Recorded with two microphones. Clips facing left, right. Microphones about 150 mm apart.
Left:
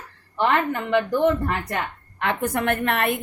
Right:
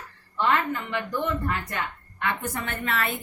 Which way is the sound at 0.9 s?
70° left (ahead or behind).